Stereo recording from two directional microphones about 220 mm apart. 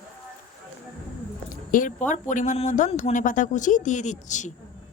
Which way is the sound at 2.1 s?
35° left (ahead or behind).